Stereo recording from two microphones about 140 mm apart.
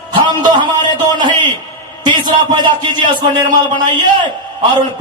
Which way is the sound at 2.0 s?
35° right (ahead or behind).